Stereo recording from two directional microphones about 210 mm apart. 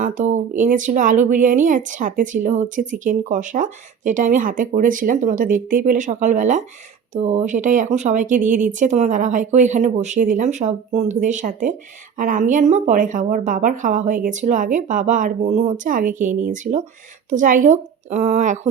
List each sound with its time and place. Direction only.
0.0 s speech: 35° right (ahead or behind)